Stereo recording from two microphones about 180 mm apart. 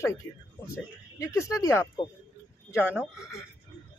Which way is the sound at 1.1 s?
15° left (ahead or behind).